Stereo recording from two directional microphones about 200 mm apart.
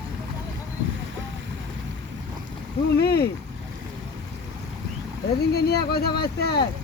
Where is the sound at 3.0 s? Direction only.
55° left (ahead or behind).